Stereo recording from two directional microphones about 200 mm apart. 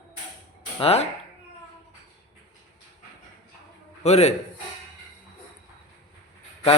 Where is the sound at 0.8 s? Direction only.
30° left (ahead or behind).